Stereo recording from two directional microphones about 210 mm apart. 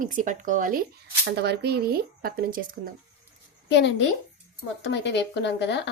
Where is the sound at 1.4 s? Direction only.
50° right (ahead or behind).